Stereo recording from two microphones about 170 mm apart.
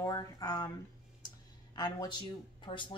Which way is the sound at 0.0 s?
20° left (ahead or behind).